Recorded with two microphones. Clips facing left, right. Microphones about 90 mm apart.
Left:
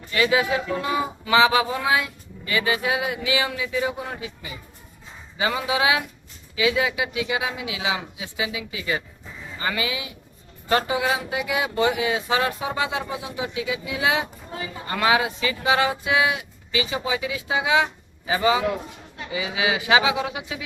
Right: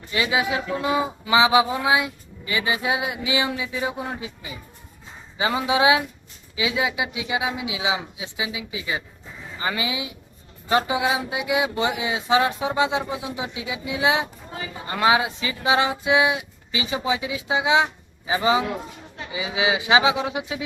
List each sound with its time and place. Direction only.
0.1 s speech: 20° right (ahead or behind)